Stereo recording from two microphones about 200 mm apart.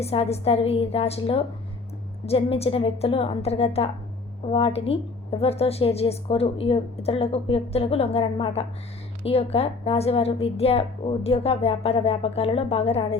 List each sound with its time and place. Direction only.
0.0 s a woman's voice: 30° left (ahead or behind)